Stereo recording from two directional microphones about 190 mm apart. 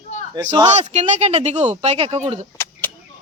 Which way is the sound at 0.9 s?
35° right (ahead or behind).